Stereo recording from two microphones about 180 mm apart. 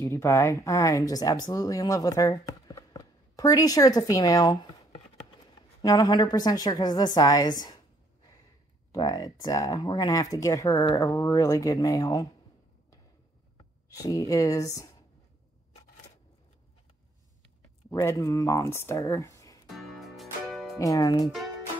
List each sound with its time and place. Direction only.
0.0 s speech: 15° left (ahead or behind)
5.8 s speech: 20° left (ahead or behind)
8.9 s speech: 20° left (ahead or behind)
13.8 s speech: 20° left (ahead or behind)
17.8 s speech: 15° left (ahead or behind)
19.7 s music: centre (ahead or behind)
20.8 s speech: 20° left (ahead or behind)